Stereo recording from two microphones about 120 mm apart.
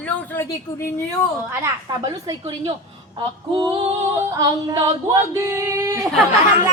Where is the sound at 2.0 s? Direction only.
30° right (ahead or behind).